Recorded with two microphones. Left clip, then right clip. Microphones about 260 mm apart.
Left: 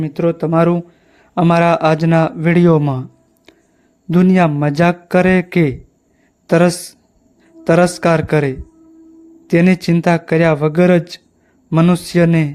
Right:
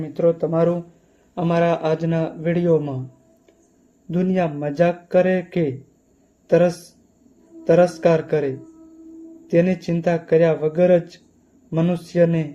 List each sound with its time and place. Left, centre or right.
0.0 s a man's voice: left
4.1 s a man's voice: left